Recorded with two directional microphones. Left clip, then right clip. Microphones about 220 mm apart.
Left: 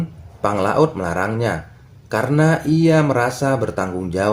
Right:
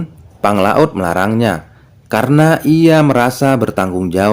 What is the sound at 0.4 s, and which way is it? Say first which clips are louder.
Speech: right 5 dB; 45° right (ahead or behind).